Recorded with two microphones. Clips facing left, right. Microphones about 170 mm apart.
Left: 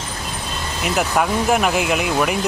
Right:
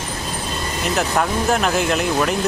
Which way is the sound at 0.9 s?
5° left (ahead or behind).